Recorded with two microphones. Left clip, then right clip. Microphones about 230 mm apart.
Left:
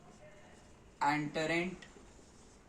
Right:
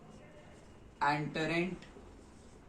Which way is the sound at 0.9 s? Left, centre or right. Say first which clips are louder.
Even; left.